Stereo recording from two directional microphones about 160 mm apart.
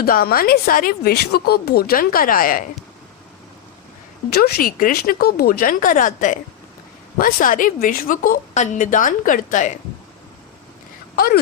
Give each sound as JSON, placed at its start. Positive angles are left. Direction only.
{"t": 0.0, "sound": "speech", "side_deg": 70}
{"t": 4.3, "sound": "a woman's voice", "side_deg": 75}